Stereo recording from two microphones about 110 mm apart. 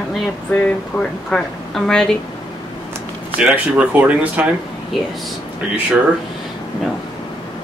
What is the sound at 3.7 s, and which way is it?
Speech, 10° right (ahead or behind).